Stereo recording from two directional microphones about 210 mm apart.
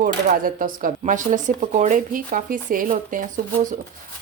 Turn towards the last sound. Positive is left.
turn(degrees=-40)  # may be behind; listen again after turning